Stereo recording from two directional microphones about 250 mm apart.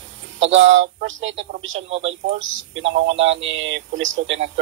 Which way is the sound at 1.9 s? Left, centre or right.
Right.